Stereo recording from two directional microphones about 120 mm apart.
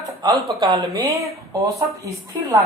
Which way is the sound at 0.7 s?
35° right (ahead or behind).